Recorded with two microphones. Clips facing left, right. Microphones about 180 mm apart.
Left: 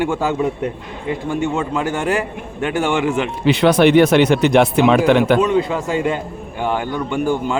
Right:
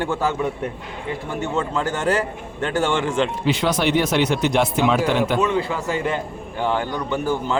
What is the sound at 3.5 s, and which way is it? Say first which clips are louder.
Speech: left 11 dB; 65° left (ahead or behind).